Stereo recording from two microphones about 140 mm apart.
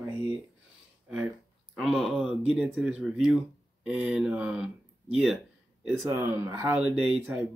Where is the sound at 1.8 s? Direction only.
Centre (ahead or behind).